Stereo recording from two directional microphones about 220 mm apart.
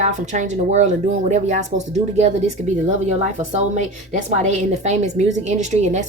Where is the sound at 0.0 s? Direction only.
30° right (ahead or behind).